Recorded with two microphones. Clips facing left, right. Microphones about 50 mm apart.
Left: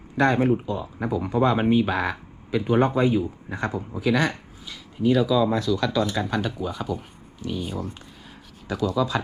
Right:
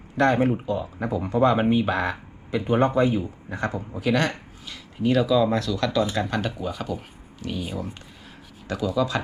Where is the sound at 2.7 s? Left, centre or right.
Centre.